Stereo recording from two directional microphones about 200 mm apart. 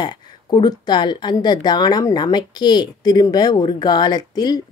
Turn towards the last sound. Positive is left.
turn(degrees=20)  # may be behind; listen again after turning